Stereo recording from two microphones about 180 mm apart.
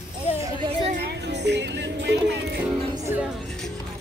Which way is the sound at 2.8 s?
20° right (ahead or behind).